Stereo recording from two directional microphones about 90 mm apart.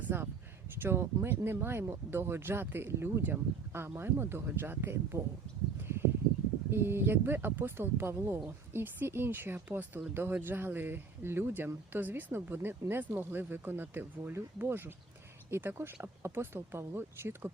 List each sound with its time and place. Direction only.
0.8 s speech: 25° right (ahead or behind)
6.7 s speech: 25° right (ahead or behind)